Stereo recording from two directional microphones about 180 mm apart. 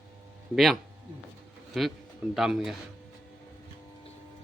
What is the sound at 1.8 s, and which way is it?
Speech, centre (ahead or behind).